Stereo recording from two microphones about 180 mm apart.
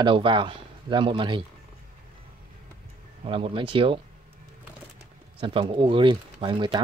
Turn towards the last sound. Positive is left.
turn(degrees=-25)  # may be behind; listen again after turning